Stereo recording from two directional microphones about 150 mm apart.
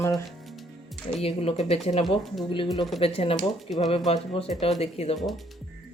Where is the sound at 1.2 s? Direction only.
45° left (ahead or behind).